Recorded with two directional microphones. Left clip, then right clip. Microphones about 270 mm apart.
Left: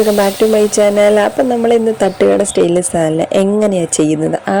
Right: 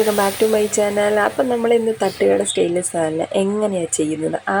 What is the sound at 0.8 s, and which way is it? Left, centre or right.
Speech, left.